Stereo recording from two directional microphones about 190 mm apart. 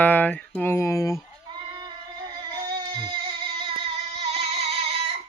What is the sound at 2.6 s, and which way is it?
Music, 25° right (ahead or behind).